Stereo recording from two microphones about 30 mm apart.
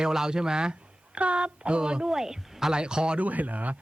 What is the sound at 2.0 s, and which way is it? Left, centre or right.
Speech, centre.